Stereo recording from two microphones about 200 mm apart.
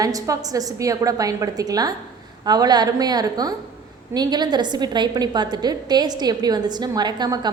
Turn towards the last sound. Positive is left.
turn(degrees=-20)  # may be behind; listen again after turning